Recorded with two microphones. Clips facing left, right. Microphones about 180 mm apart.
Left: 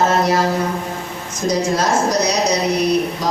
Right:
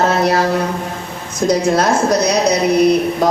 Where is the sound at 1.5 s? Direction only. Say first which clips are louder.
Right 3 dB; 60° right (ahead or behind).